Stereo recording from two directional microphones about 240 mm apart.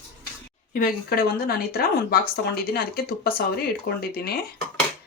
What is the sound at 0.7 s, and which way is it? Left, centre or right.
Speech, left.